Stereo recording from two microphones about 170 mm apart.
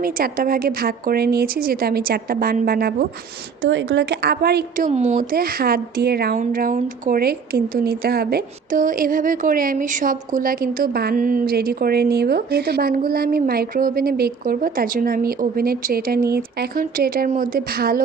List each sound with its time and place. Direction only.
0.0 s speech: 55° right (ahead or behind)
3.6 s a woman's voice: 90° right; by 4.9 s 70° right (ahead or behind)
4.9 s speech: 40° right (ahead or behind); by 6.4 s 70° right (ahead or behind)
6.4 s speech: 55° right (ahead or behind)